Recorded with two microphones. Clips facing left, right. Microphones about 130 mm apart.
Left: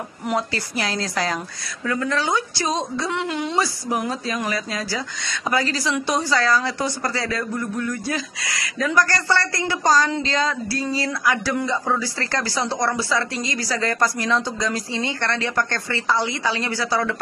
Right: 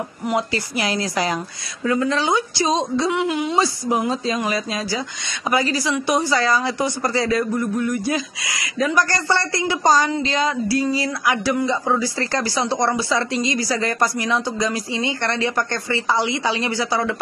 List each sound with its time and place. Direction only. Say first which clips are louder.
0.3 s a woman's voice: right 2 dB; 15° right (ahead or behind)
3.5 s a woman's voice: right 2 dB; 20° right (ahead or behind)